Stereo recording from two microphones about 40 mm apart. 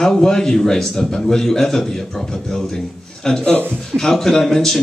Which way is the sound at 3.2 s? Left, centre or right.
Centre.